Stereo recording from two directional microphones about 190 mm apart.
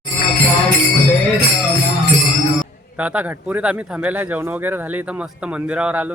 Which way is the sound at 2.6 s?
5° right (ahead or behind).